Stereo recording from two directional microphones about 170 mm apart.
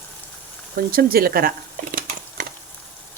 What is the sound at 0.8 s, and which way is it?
Speech, 60° right (ahead or behind).